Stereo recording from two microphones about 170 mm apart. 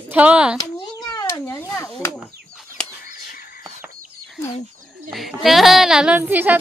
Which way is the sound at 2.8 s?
5° left (ahead or behind).